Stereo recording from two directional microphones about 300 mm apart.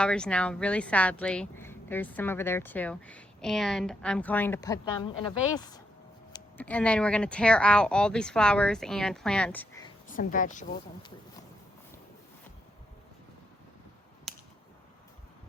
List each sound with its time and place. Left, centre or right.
0.0 s speech: centre
10.1 s speech: left
14.3 s a sound: centre